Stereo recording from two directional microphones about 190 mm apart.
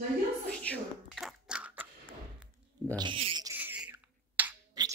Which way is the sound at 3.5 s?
10° right (ahead or behind).